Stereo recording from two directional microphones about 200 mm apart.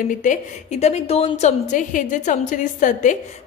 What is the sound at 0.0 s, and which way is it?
A woman's voice, 40° left (ahead or behind).